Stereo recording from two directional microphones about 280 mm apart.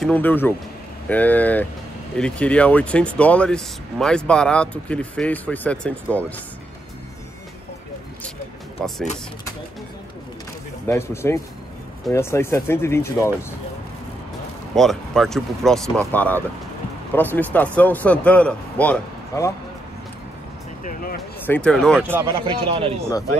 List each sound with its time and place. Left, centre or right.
0.0 s speech: centre
10.9 s speech: centre
14.8 s speech: centre
20.8 s speech: left
21.5 s speech: centre
22.1 s speech: centre